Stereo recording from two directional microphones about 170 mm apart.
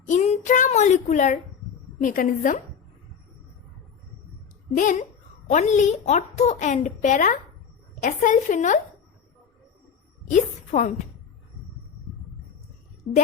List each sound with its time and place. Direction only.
0.1 s a sound: 45° left (ahead or behind)
2.0 s a woman's voice: 50° left (ahead or behind)
4.8 s a woman's voice: 50° left (ahead or behind)
10.2 s a woman's voice: 45° left (ahead or behind)